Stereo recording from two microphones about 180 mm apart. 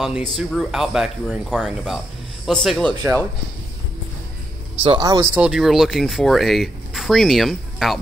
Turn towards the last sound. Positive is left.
turn(degrees=0)  # may be behind; listen again after turning